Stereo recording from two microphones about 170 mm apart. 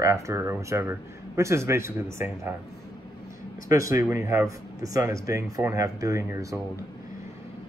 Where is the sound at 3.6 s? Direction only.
20° right (ahead or behind).